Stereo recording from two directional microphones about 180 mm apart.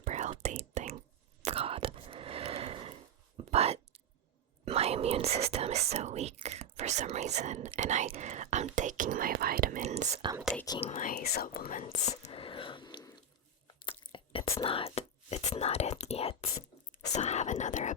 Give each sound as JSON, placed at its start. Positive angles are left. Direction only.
{"t": 0.0, "sound": "whispering", "side_deg": -40}
{"t": 4.6, "sound": "speech", "side_deg": -35}
{"t": 9.8, "sound": "whispering", "side_deg": -40}
{"t": 10.8, "sound": "speech", "side_deg": 40}
{"t": 11.1, "sound": "whispering", "side_deg": 60}
{"t": 13.8, "sound": "biting", "side_deg": 25}
{"t": 14.6, "sound": "speech", "side_deg": 30}